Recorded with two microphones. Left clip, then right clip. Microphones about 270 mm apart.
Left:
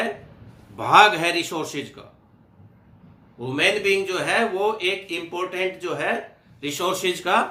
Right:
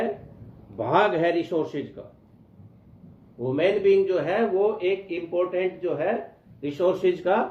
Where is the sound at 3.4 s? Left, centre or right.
Centre.